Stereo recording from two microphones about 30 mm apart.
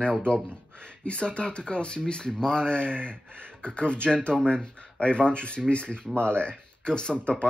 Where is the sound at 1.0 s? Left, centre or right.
Left.